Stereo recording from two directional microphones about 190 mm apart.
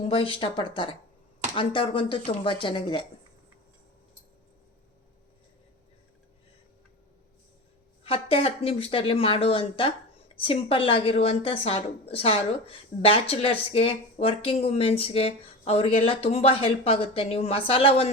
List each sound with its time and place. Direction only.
0.1 s speech: 30° left (ahead or behind)
8.0 s speech: 30° left (ahead or behind)